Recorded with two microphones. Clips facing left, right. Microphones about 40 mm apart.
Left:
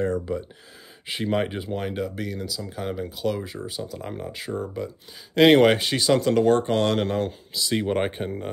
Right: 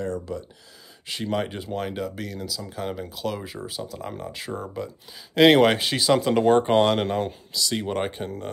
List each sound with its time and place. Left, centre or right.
0.0 s speech: left
1.0 s speech: centre
7.5 s speech: centre